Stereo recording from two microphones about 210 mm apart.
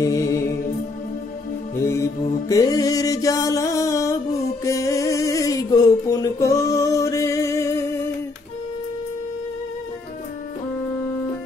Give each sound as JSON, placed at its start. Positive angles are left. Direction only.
{"t": 0.0, "sound": "music", "side_deg": 15}
{"t": 1.8, "sound": "music", "side_deg": 15}